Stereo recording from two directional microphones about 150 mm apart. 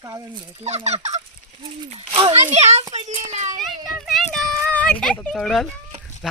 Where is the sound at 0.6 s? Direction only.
45° right (ahead or behind).